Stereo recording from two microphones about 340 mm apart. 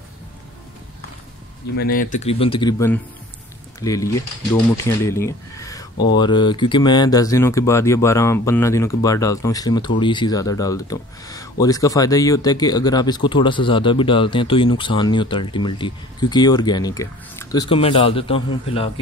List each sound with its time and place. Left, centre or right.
1.8 s speech: left